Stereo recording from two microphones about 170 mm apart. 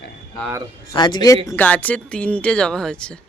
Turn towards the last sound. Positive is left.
turn(degrees=5)  # may be behind; listen again after turning